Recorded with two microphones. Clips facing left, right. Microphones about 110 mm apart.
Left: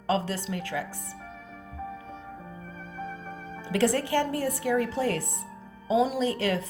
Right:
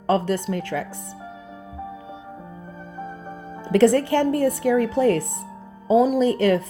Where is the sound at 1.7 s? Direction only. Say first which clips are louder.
Right 3 dB; 10° right (ahead or behind).